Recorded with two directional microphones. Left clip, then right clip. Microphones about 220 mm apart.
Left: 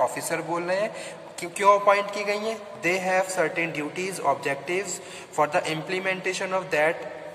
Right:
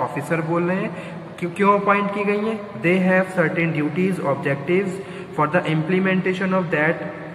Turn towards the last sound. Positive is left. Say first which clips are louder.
# right 3 dB
turn(degrees=60)  # may be behind; listen again after turning